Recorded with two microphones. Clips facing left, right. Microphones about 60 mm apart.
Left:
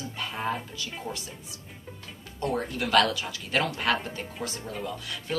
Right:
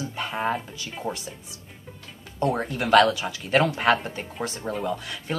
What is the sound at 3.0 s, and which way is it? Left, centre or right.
Speech, centre.